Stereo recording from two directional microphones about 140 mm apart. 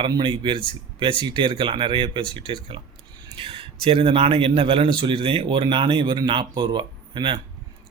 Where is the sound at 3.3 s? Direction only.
40° right (ahead or behind).